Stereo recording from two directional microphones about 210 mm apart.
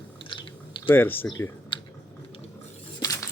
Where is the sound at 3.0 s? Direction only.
15° left (ahead or behind).